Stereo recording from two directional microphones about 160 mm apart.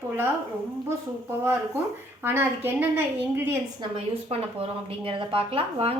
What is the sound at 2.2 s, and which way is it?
Speech, 10° right (ahead or behind).